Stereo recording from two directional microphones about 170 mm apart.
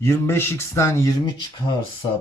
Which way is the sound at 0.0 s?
15° left (ahead or behind).